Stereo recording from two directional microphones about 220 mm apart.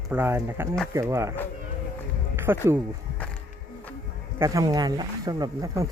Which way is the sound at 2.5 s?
10° right (ahead or behind).